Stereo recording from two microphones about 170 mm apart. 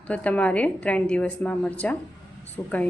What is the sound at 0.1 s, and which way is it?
A woman's voice, 10° left (ahead or behind).